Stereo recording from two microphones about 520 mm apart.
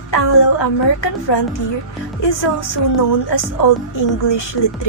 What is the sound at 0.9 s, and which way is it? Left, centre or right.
A woman's voice, left.